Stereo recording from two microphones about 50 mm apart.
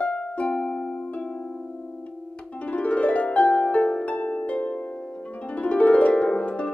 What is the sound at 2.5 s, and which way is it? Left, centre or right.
Harp, left.